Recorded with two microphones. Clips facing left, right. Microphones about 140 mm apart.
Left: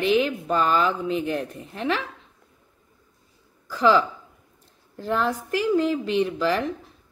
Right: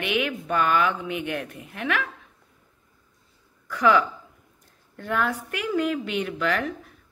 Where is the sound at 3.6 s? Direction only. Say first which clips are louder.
Left 1 dB; 30° left (ahead or behind).